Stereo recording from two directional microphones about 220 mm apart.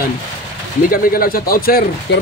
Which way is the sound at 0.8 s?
40° left (ahead or behind).